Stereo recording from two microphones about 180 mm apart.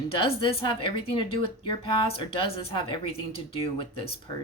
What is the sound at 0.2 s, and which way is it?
Speech, 30° left (ahead or behind).